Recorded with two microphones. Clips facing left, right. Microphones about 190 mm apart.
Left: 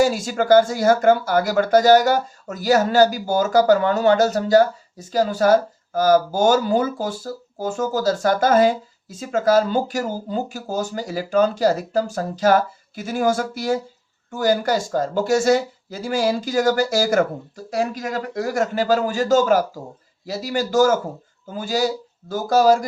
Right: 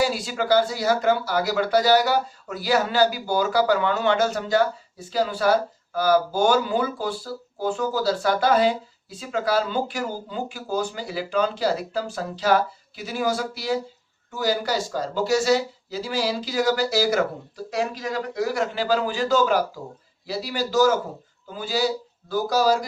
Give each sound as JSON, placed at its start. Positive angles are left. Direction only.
{"t": 0.0, "sound": "speech", "side_deg": 45}